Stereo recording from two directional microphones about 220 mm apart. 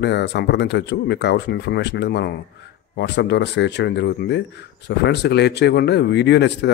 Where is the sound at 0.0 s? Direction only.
50° left (ahead or behind).